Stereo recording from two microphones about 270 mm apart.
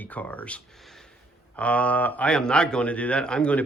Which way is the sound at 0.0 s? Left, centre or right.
Centre.